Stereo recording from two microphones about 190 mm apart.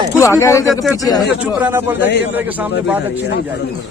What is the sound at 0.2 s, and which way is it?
Speech, 15° left (ahead or behind).